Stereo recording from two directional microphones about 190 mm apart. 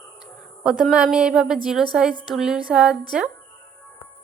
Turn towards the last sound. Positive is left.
turn(degrees=-5)  # may be behind; listen again after turning